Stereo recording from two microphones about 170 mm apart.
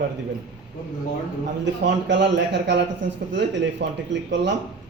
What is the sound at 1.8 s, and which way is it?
Speech, 90° right.